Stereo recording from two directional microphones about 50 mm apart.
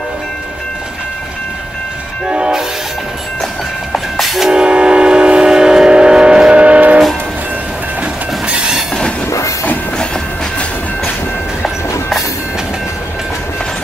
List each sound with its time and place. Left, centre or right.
2.2 s train: centre
3.9 s train: centre
4.6 s train: centre